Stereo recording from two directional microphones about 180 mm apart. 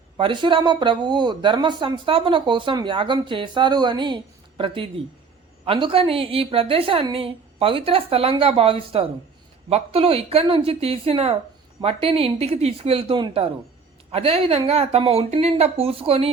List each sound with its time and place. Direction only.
0.2 s a woman's voice: 25° right (ahead or behind)